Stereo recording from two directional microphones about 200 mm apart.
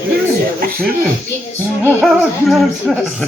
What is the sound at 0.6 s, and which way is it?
Speech, 45° right (ahead or behind).